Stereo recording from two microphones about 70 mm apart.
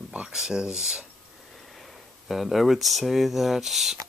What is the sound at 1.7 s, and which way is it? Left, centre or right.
Speech, centre.